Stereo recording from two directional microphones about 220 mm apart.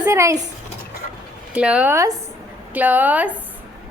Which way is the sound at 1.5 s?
5° right (ahead or behind).